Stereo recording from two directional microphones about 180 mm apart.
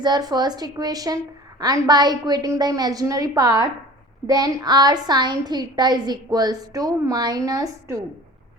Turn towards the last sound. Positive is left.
turn(degrees=-15)  # may be behind; listen again after turning